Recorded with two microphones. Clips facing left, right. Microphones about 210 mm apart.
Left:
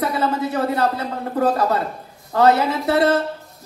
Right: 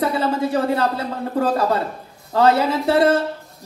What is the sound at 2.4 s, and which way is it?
Speech, 30° right (ahead or behind).